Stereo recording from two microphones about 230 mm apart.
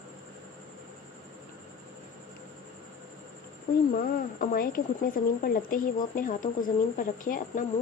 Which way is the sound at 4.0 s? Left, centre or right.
Left.